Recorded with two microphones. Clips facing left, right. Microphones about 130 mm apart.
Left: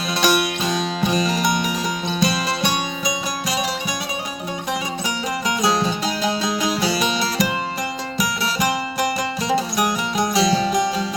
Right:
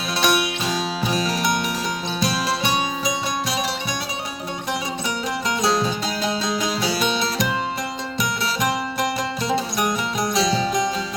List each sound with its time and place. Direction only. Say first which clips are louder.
0.2 s music: left 2 dB; centre (ahead or behind)
5.6 s music: left 1 dB; centre (ahead or behind)